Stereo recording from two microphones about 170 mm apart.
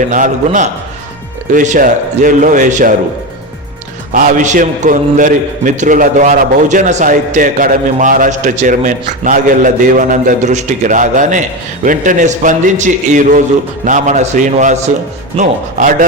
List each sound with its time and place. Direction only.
0.1 s a man's voice: 50° right (ahead or behind)
4.1 s a man's voice: 50° right (ahead or behind)